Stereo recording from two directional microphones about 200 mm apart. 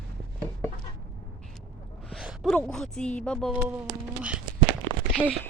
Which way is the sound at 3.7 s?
5° right (ahead or behind).